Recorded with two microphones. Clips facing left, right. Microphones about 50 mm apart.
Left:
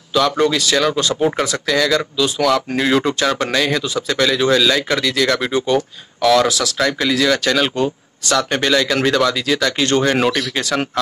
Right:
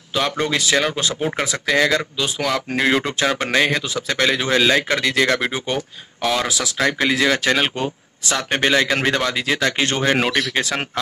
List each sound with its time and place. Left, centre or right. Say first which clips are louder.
0.1 s speech: left 5 dB; right